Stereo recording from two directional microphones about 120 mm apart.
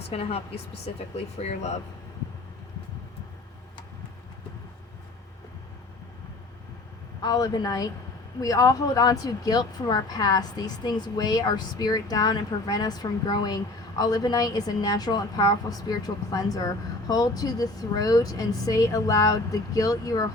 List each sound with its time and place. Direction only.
0.1 s speech: 60° left (ahead or behind)
7.2 s speech: 35° left (ahead or behind)